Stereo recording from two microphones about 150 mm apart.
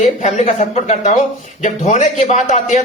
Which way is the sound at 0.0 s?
50° left (ahead or behind).